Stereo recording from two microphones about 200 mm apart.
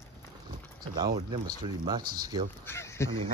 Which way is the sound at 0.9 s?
20° right (ahead or behind).